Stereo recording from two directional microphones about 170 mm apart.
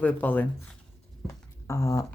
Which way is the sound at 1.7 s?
20° left (ahead or behind).